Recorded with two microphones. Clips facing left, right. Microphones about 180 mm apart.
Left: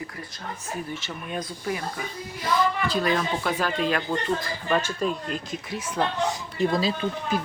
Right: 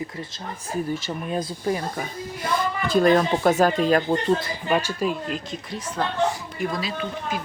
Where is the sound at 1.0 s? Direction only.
30° right (ahead or behind).